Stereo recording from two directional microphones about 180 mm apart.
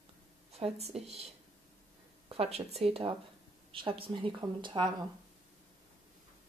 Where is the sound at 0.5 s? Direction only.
35° right (ahead or behind).